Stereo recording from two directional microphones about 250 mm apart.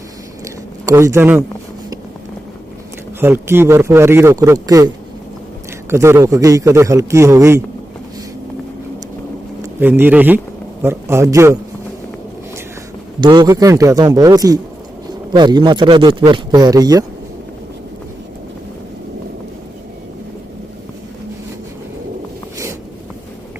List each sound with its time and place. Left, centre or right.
0.4 s a sound: centre
3.2 s speech: centre
5.9 s speech: centre
9.6 s speech: centre
13.1 s speech: centre